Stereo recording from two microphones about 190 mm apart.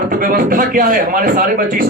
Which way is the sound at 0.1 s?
50° right (ahead or behind).